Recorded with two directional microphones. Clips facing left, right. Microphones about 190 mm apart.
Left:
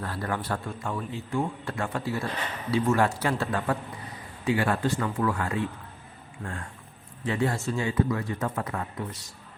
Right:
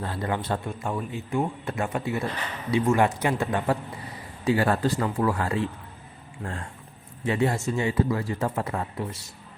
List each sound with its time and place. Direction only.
0.0 s speech: 20° right (ahead or behind)
4.4 s speech: 40° right (ahead or behind)